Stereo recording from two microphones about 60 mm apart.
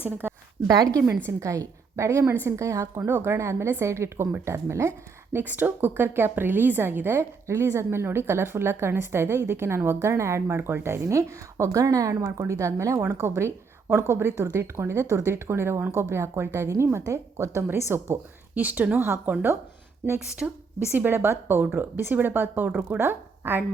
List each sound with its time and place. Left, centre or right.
0.0 s speech: right
0.8 s a woman's voice: right
1.4 s a woman's voice: right
2.3 s a woman's voice: right
3.1 s a woman's voice: right
5.4 s a woman's voice: right
11.0 s speech: right
12.4 s a woman's voice: right
18.5 s speech: right
19.0 s speech: right
20.4 s a woman's voice: centre
20.9 s speech: right